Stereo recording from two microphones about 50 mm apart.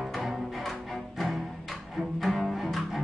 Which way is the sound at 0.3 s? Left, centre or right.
Centre.